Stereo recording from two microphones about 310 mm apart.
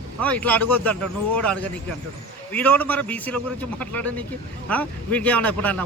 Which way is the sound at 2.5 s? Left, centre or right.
Centre.